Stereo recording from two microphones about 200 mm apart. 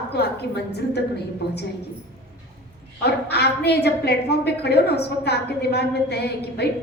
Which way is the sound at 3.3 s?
55° left (ahead or behind).